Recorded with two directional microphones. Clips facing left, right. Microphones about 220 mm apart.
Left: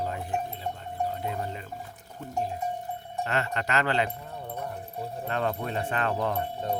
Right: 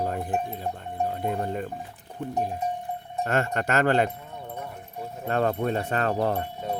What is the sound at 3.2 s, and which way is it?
Speech, 50° right (ahead or behind).